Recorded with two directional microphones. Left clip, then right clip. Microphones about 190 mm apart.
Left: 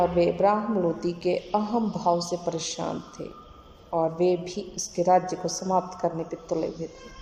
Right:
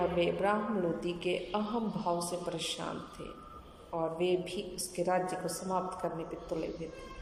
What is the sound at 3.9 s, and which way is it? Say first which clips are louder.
A woman's voice: left 8 dB; 25° left (ahead or behind).